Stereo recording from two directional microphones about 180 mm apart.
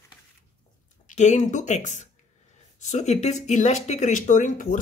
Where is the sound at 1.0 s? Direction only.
40° left (ahead or behind).